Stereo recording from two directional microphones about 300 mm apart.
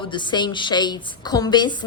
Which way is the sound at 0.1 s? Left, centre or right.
Centre.